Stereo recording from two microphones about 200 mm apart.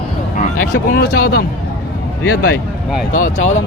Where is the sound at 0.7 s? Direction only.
50° left (ahead or behind).